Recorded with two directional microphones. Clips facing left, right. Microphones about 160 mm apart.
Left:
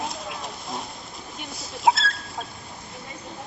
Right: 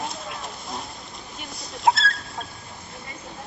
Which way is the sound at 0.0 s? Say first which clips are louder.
Left 1 dB; centre (ahead or behind).